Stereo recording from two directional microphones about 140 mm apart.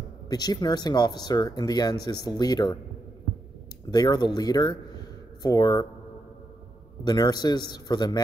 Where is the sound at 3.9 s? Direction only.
30° left (ahead or behind).